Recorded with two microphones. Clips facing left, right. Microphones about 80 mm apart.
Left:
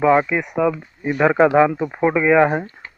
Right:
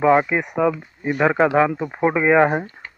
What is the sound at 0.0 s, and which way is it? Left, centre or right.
Speech, centre.